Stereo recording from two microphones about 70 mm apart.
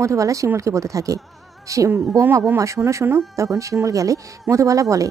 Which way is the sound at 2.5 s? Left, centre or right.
Right.